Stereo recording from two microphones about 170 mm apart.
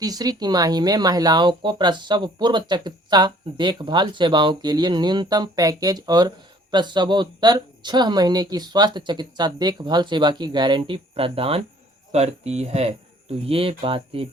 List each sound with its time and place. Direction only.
0.0 s speech: 20° right (ahead or behind)